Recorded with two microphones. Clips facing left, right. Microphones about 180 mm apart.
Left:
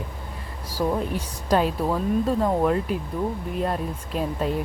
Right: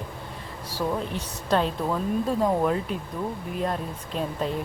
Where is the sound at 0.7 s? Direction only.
10° left (ahead or behind).